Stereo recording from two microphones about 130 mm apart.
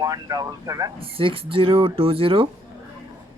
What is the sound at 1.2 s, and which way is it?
Speech, 45° right (ahead or behind).